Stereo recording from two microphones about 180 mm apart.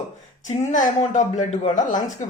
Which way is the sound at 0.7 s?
40° left (ahead or behind).